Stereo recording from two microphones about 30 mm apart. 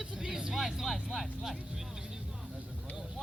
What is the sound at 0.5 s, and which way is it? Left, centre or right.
Speech, centre.